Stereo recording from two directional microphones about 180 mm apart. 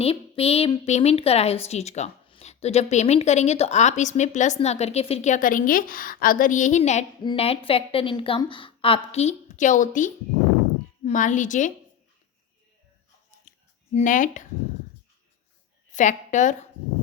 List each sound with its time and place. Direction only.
0.0 s a woman's voice: 35° left (ahead or behind)
13.9 s a woman's voice: 45° left (ahead or behind)
15.9 s a woman's voice: 45° left (ahead or behind)